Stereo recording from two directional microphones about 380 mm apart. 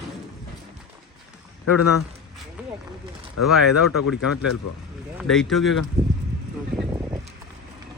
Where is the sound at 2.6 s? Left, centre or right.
Centre.